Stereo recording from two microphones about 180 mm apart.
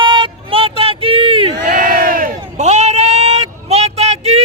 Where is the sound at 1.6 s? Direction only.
50° right (ahead or behind).